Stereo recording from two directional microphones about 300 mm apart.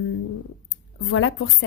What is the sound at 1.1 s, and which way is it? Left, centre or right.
Speech, left.